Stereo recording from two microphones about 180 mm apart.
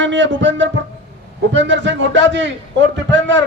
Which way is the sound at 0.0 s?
85° right.